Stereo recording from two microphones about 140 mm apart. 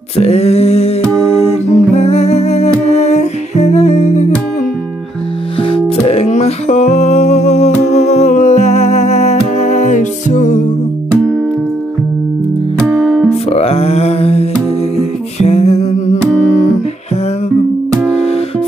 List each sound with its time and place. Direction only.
0.2 s music: 45° left (ahead or behind)
2.9 s humming: 50° left (ahead or behind)
5.6 s music: 45° left (ahead or behind); by 10.6 s 65° left (ahead or behind)
12.7 s music: centre (ahead or behind)
13.5 s a sound: 45° left (ahead or behind)
15.4 s music: 50° left (ahead or behind)